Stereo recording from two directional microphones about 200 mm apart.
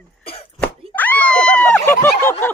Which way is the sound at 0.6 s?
10° left (ahead or behind).